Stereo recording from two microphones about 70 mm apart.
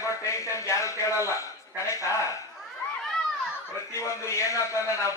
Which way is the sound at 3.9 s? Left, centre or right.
Left.